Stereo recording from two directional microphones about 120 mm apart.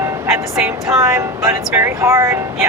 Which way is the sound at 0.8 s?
25° right (ahead or behind).